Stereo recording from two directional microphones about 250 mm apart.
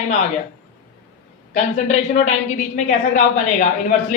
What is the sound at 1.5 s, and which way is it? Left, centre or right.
Speech, left.